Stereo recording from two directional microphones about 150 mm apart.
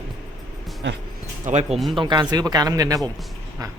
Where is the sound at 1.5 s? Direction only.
55° right (ahead or behind).